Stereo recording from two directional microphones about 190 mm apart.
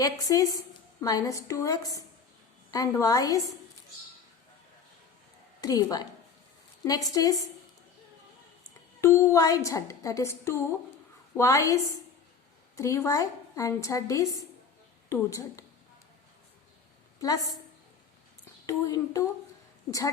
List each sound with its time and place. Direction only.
0.0 s a woman's voice: 20° left (ahead or behind)
5.5 s a woman's voice: 20° left (ahead or behind)
9.0 s a woman's voice: 15° left (ahead or behind)
17.2 s a woman's voice: 20° left (ahead or behind)
18.6 s a woman's voice: 15° left (ahead or behind)